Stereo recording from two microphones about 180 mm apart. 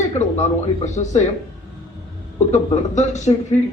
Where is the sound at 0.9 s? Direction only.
40° left (ahead or behind).